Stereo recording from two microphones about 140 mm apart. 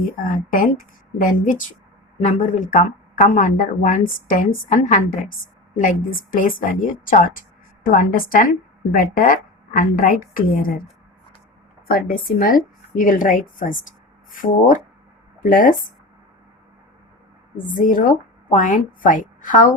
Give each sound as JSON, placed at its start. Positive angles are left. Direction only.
{"t": 0.0, "sound": "a woman's voice", "side_deg": 75}
{"t": 5.7, "sound": "a woman's voice", "side_deg": 85}
{"t": 11.9, "sound": "a woman's voice", "side_deg": 90}
{"t": 17.7, "sound": "a woman's voice", "side_deg": 80}